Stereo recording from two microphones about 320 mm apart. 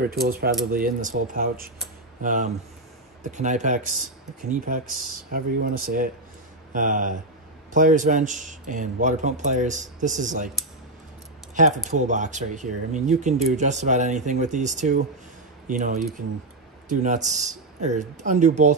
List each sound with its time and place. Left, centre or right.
0.0 s a man's voice: right
11.5 s a man's voice: right
17.0 s a man's voice: right